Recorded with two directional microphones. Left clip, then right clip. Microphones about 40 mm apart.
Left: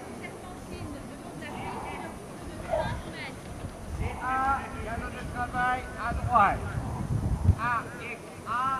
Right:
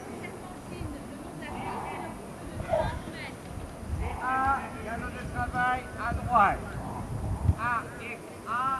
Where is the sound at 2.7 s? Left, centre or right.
Right.